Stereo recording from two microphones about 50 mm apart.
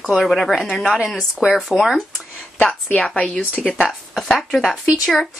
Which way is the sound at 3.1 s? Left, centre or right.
Left.